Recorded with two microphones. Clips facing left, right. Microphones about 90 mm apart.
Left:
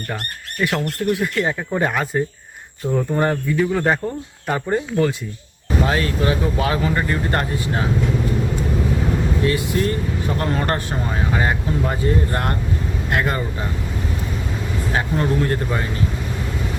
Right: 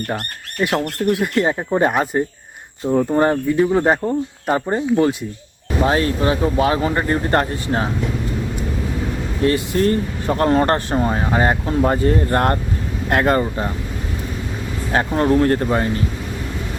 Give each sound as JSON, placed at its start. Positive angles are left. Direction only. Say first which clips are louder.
{"t": 0.6, "sound": "speech", "louder": "right 2 dB", "side_deg": -20}
{"t": 9.5, "sound": "speech", "louder": "right 3 dB", "side_deg": -40}
{"t": 14.9, "sound": "speech", "louder": "right 5 dB", "side_deg": -40}